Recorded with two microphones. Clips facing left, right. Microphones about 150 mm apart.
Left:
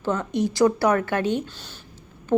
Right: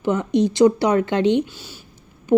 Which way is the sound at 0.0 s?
15° right (ahead or behind).